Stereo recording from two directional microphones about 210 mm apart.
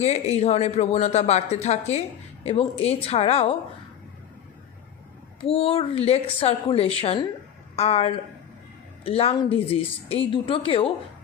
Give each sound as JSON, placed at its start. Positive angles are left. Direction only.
{"t": 0.0, "sound": "speech", "side_deg": 30}
{"t": 5.4, "sound": "speech", "side_deg": 25}